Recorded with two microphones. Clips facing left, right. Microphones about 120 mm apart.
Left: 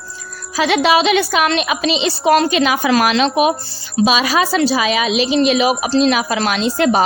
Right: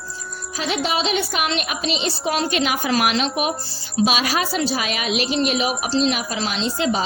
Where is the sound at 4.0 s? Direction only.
70° left (ahead or behind).